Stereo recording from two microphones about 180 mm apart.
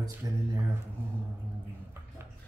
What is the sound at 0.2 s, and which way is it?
Speech, 20° right (ahead or behind).